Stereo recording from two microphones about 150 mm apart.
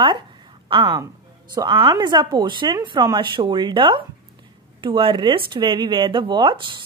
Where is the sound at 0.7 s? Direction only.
35° right (ahead or behind).